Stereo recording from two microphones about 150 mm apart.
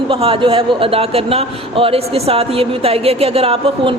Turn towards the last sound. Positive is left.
turn(degrees=-35)  # may be behind; listen again after turning